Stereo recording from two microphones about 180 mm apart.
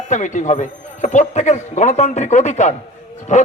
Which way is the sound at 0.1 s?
45° left (ahead or behind).